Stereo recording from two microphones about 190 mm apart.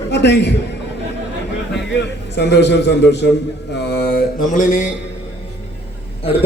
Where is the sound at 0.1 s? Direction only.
65° left (ahead or behind).